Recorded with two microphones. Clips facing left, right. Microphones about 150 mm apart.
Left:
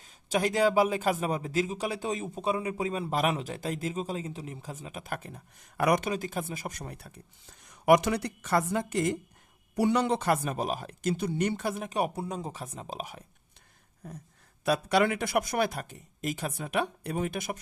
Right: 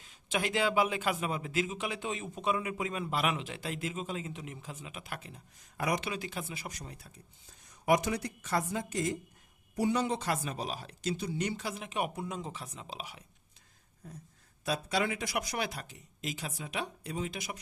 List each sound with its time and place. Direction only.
0.0 s speech: 40° left (ahead or behind); by 6.1 s 65° left (ahead or behind)
6.1 s speech: 45° left (ahead or behind)
14.6 s speech: 65° left (ahead or behind)